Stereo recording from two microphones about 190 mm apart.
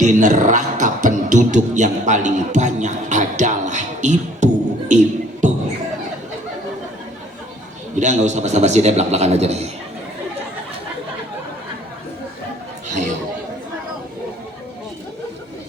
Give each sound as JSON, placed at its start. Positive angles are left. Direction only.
{"t": 0.0, "sound": "speech", "side_deg": -40}
{"t": 4.9, "sound": "a sound", "side_deg": -40}
{"t": 7.9, "sound": "a man's voice", "side_deg": -40}
{"t": 12.9, "sound": "chatter", "side_deg": -40}